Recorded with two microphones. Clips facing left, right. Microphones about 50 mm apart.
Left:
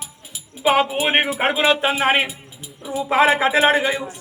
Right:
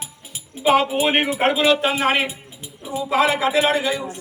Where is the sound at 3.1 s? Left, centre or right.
Left.